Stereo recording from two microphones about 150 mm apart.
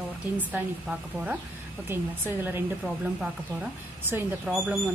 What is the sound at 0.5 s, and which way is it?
A woman's voice, 10° right (ahead or behind).